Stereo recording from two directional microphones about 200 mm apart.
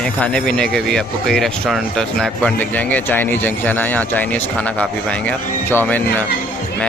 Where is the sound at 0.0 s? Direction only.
5° left (ahead or behind).